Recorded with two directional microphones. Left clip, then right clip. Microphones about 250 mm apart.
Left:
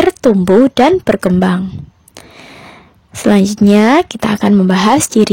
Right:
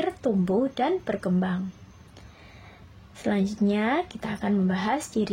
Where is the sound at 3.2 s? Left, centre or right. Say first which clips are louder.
Left 15 dB; left.